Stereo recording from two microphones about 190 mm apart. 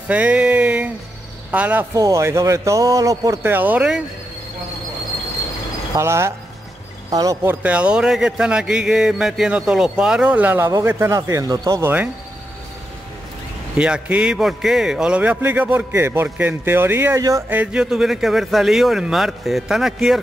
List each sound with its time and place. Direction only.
0.1 s a sound: 5° right (ahead or behind)
1.5 s speech: 10° right (ahead or behind)
5.9 s speech: 15° right (ahead or behind)
7.6 s a man's voice: 5° right (ahead or behind)
13.7 s a man's voice: 5° right (ahead or behind)